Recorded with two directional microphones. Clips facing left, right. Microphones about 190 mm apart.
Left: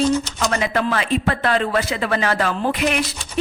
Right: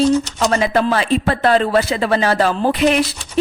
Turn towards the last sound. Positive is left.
turn(degrees=-30)  # may be behind; listen again after turning